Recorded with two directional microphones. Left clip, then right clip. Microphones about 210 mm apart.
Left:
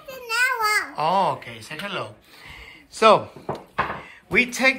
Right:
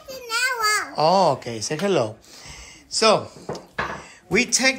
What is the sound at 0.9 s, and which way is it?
Speech, 25° right (ahead or behind).